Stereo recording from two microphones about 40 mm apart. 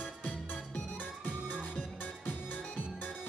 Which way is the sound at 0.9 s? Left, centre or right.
Left.